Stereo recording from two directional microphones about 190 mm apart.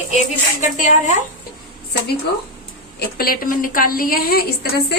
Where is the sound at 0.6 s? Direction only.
40° left (ahead or behind).